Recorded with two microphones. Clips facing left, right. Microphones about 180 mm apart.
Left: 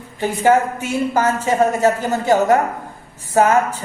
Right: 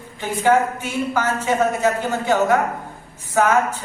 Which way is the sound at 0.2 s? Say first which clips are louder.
Left 2 dB; 40° left (ahead or behind).